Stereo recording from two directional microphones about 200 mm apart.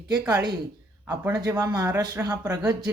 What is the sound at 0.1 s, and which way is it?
Speech, 20° right (ahead or behind).